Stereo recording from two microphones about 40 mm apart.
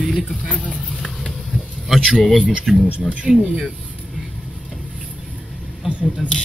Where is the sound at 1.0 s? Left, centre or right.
Centre.